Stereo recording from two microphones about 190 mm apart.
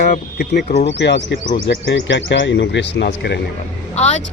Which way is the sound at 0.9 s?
65° left (ahead or behind).